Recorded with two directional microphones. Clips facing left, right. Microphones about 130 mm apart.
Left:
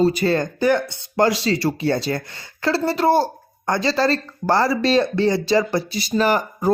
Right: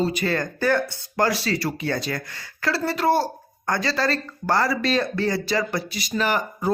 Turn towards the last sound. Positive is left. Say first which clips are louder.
# left 5 dB
turn(degrees=35)  # may be behind; listen again after turning